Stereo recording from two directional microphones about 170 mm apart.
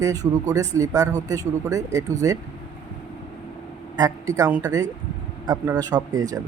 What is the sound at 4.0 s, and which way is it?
A man's voice, 20° right (ahead or behind).